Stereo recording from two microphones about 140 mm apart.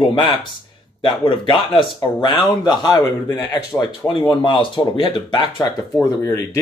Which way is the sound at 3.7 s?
10° left (ahead or behind).